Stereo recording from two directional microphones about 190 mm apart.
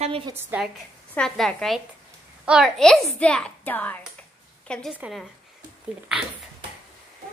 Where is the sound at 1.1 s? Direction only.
Centre (ahead or behind).